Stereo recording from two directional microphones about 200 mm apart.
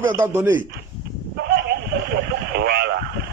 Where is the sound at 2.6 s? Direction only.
55° right (ahead or behind).